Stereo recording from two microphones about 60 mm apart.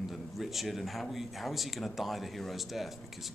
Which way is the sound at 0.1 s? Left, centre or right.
Centre.